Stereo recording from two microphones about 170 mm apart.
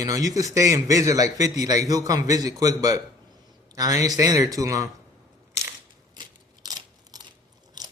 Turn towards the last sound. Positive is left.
turn(degrees=-25)  # may be behind; listen again after turning